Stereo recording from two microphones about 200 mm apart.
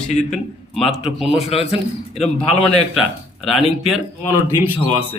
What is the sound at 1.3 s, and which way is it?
Speech, 30° left (ahead or behind).